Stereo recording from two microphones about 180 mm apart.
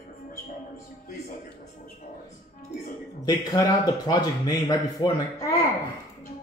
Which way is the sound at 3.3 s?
20° left (ahead or behind).